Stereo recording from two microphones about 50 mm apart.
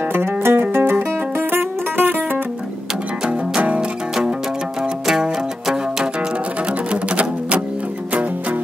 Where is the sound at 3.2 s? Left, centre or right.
Right.